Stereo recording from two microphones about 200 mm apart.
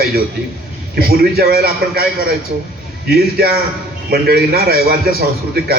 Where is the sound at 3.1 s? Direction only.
50° right (ahead or behind).